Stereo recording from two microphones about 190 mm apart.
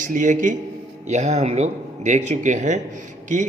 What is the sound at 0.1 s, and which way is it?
A man's voice, 40° right (ahead or behind).